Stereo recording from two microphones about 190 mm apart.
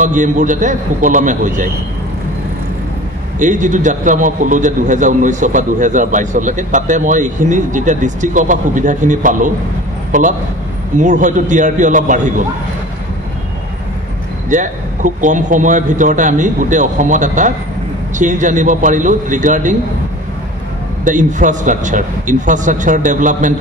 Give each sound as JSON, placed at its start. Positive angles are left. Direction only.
{"t": 0.0, "sound": "a man's voice", "side_deg": -40}
{"t": 3.3, "sound": "a man's voice", "side_deg": -40}
{"t": 14.5, "sound": "a man's voice", "side_deg": -40}
{"t": 21.0, "sound": "a man's voice", "side_deg": -40}